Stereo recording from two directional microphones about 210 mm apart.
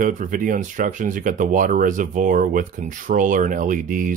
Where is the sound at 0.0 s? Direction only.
40° right (ahead or behind).